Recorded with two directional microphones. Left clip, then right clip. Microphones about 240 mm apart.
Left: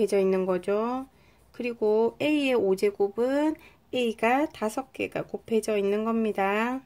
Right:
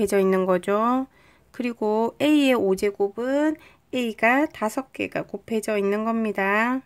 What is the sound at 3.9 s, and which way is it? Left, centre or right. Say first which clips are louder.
Speech: right 3 dB; right.